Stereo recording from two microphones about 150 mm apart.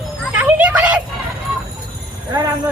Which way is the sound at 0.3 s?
10° right (ahead or behind).